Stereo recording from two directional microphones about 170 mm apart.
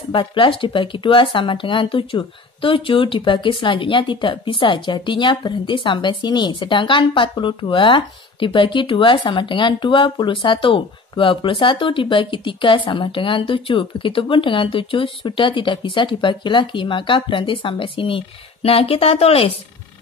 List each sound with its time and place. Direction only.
0.1 s speech: 30° left (ahead or behind)